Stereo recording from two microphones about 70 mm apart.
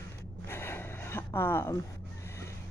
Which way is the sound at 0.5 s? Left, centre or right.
Left.